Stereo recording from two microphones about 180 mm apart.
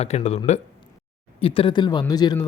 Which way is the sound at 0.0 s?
35° left (ahead or behind).